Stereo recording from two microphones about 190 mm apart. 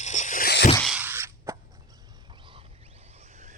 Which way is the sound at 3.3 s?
40° right (ahead or behind).